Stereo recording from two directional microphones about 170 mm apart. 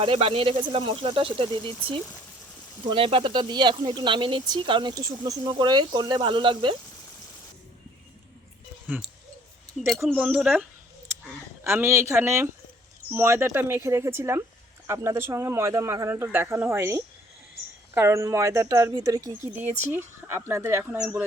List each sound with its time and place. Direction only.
0.0 s speech: 35° right (ahead or behind)
9.7 s speech: 5° right (ahead or behind)